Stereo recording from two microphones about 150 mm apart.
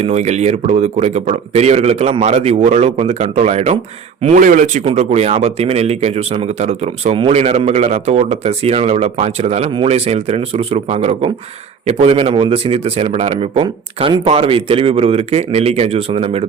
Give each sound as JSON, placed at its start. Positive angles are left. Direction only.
{"t": 0.0, "sound": "speech", "side_deg": -45}
{"t": 4.4, "sound": "speech", "side_deg": -60}
{"t": 4.9, "sound": "speech", "side_deg": -45}